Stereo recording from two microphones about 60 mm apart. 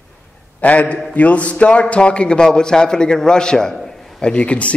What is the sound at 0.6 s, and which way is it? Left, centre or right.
A man's voice, left.